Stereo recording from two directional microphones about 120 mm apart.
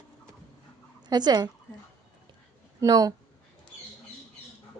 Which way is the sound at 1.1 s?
35° right (ahead or behind).